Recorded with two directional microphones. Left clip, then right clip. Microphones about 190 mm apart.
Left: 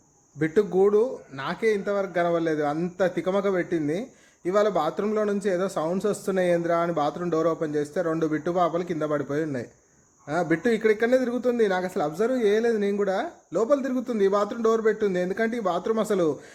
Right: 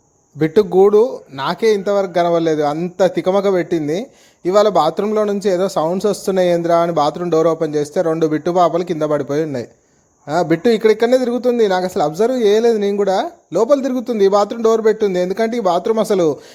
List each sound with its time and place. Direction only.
0.3 s speech: 35° right (ahead or behind)